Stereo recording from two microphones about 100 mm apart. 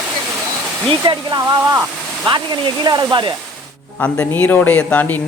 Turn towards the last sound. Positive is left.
turn(degrees=15)  # may be behind; listen again after turning